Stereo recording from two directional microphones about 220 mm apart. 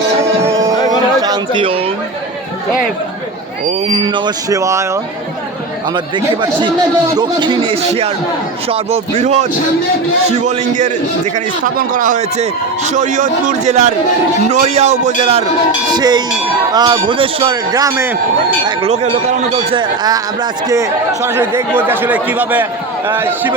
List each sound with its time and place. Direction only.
0.2 s music: 10° right (ahead or behind)
1.2 s a sound: 20° right (ahead or behind)
3.7 s speech: 25° right (ahead or behind)
6.1 s a man's voice: 20° right (ahead or behind)
18.6 s speech: 25° right (ahead or behind); by 23.6 s 10° right (ahead or behind)